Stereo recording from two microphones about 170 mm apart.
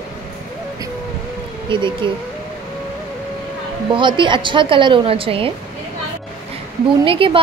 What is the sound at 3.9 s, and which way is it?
A woman's voice, 30° right (ahead or behind).